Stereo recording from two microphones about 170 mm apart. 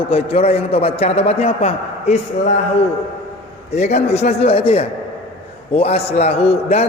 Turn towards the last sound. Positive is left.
turn(degrees=40)  # may be behind; listen again after turning